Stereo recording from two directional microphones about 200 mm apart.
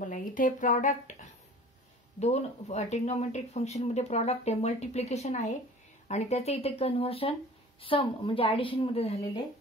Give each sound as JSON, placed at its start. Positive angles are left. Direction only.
{"t": 0.0, "sound": "speech", "side_deg": 40}
{"t": 2.1, "sound": "a woman's voice", "side_deg": 35}